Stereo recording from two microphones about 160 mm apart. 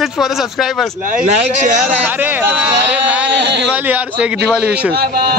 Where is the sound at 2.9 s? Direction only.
10° right (ahead or behind).